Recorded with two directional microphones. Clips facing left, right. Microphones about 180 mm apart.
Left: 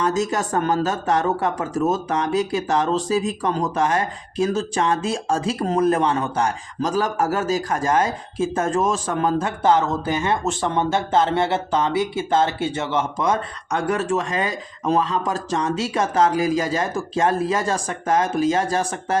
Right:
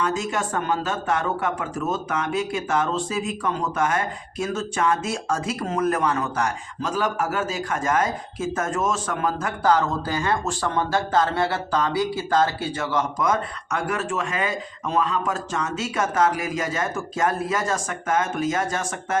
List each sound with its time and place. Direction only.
0.0 s speech: 40° left (ahead or behind)